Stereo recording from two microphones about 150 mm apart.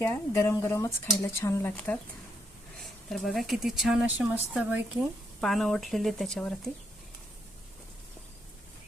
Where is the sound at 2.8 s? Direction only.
Centre (ahead or behind).